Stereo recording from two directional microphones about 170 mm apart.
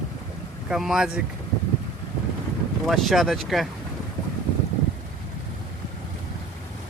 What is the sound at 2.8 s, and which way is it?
Speech, centre (ahead or behind).